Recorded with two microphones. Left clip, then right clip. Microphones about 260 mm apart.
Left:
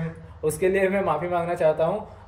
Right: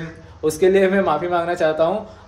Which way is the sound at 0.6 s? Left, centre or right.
Centre.